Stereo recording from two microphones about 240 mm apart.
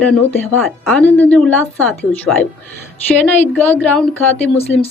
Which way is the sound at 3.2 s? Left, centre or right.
Centre.